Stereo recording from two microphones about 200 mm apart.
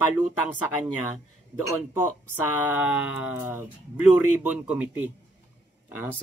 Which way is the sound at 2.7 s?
5° right (ahead or behind).